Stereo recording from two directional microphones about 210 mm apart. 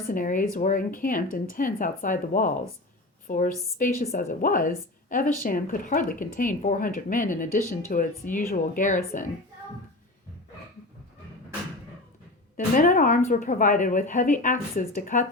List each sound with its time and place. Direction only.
0.1 s speech: 40° left (ahead or behind)
12.5 s speech: 40° left (ahead or behind)